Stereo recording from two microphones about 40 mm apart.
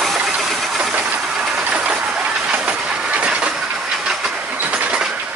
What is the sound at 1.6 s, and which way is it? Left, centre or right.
Train, right.